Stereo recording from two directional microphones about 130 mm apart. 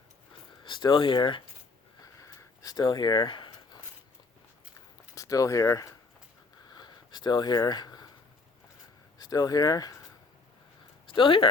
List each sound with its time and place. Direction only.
0.6 s speech: 35° left (ahead or behind)
2.2 s a sound: 25° left (ahead or behind)
5.1 s speech: 25° left (ahead or behind)
6.7 s a sound: 35° left (ahead or behind)
9.1 s speech: 30° left (ahead or behind)
11.1 s speech: 40° left (ahead or behind)